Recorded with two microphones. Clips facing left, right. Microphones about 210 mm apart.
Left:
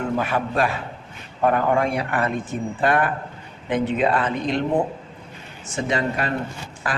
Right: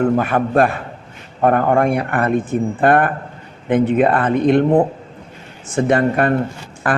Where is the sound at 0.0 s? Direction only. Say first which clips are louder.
Right 7 dB; 50° right (ahead or behind).